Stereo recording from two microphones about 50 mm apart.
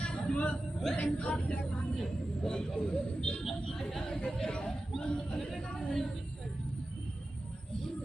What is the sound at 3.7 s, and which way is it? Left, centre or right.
Speech, centre.